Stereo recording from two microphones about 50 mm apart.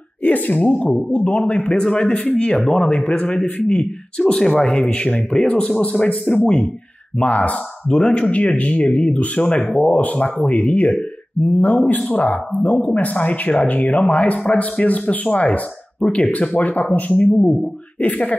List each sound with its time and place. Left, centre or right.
0.2 s speech: left
4.2 s speech: centre
4.8 s speech: left
6.3 s speech: left